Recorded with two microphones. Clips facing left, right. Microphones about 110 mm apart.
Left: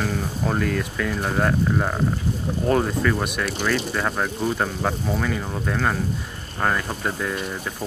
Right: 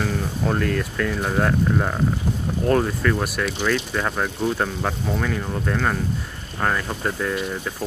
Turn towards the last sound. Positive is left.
turn(degrees=0)  # may be behind; listen again after turning